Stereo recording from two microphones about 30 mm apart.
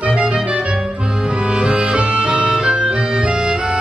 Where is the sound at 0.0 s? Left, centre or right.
Right.